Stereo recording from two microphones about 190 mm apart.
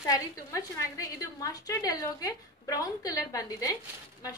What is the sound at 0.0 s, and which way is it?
A woman's voice, 15° left (ahead or behind).